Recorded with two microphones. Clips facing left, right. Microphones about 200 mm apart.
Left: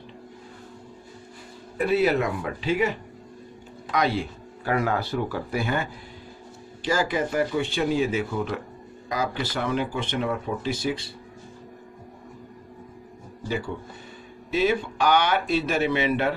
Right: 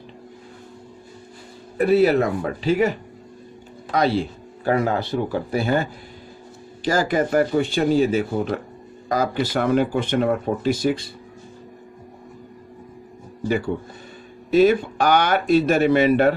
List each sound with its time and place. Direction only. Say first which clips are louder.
1.8 s speech: right 5 dB; 40° right (ahead or behind)
3.9 s speech: right 4 dB; 30° right (ahead or behind)
14.5 s speech: right 8 dB; 45° right (ahead or behind)